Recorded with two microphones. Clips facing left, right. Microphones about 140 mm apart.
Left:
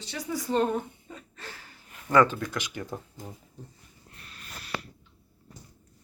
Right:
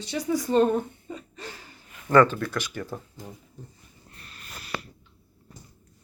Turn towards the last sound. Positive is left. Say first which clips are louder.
# right 1 dB
turn(degrees=-5)  # may be behind; listen again after turning